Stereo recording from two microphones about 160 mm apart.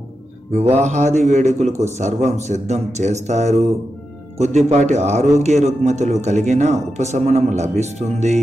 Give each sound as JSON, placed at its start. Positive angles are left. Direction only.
{"t": 0.7, "sound": "a man's voice", "side_deg": -45}